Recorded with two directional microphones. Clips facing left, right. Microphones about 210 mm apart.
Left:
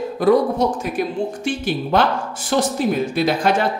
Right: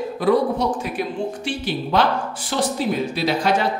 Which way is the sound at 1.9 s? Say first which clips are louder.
Left 1 dB; 50° left (ahead or behind).